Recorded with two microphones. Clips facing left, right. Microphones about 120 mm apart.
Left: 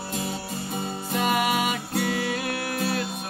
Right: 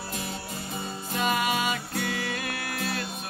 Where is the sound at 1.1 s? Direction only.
50° left (ahead or behind).